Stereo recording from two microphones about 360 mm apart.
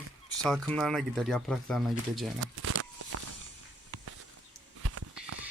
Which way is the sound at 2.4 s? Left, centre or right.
Right.